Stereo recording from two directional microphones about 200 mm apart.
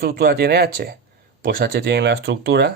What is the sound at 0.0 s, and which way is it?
Speech, 50° right (ahead or behind).